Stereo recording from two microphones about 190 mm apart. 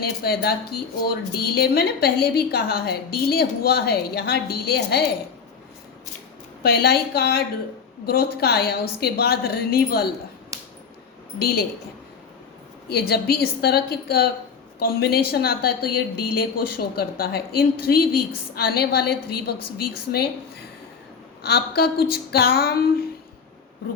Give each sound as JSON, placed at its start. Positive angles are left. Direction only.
{"t": 0.0, "sound": "speech", "side_deg": 55}
{"t": 6.6, "sound": "speech", "side_deg": 55}
{"t": 10.5, "sound": "a sound", "side_deg": -15}
{"t": 12.9, "sound": "a woman's voice", "side_deg": 55}